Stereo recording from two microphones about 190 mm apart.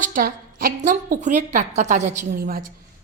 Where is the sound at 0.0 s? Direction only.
45° right (ahead or behind).